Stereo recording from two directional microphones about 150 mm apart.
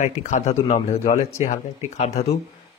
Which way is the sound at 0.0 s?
55° left (ahead or behind).